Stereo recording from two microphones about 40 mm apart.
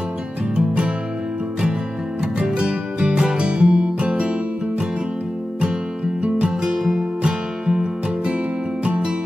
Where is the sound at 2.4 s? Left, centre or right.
Right.